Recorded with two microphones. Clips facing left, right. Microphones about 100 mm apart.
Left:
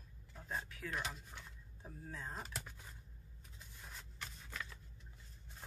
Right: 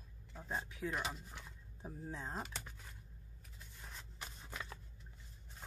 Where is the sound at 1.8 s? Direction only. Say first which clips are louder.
Right 3 dB; 20° right (ahead or behind).